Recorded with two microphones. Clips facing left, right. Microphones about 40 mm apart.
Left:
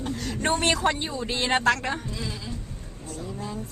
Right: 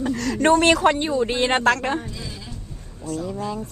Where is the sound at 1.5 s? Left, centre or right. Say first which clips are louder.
Even; right.